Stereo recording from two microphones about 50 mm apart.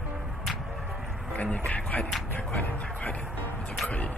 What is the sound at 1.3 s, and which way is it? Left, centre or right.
Speech, left.